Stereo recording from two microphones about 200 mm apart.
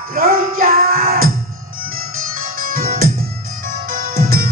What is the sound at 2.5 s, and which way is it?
Music, 45° right (ahead or behind).